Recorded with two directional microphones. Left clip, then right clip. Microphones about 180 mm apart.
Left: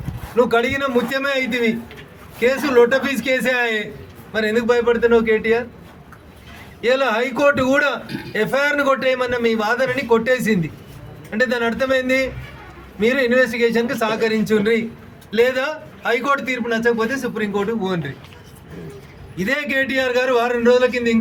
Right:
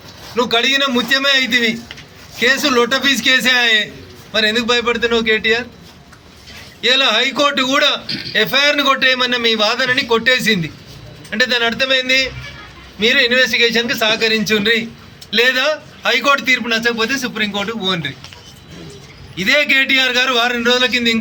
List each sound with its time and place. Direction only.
0.3 s a man's voice: 15° left (ahead or behind)
6.8 s a man's voice: 15° left (ahead or behind)
8.0 s speech: 35° left (ahead or behind)
8.3 s a man's voice: 15° left (ahead or behind)
19.5 s a man's voice: 10° left (ahead or behind)